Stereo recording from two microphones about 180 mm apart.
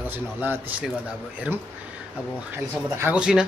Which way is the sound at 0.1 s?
10° right (ahead or behind).